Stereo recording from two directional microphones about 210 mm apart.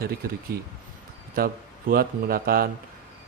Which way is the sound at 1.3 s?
45° right (ahead or behind).